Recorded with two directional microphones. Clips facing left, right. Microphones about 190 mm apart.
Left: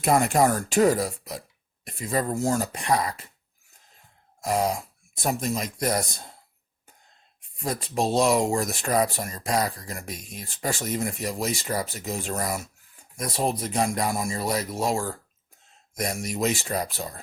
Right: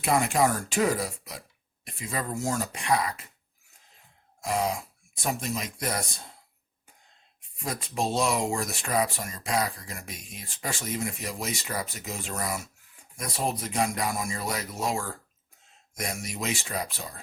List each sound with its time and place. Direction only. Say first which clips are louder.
0.0 s speech: left 3 dB; 45° left (ahead or behind)
4.4 s throat clearing: left 3 dB; 40° left (ahead or behind)
5.1 s speech: left 4 dB; 40° left (ahead or behind)
7.6 s speech: left 4 dB; 35° left (ahead or behind)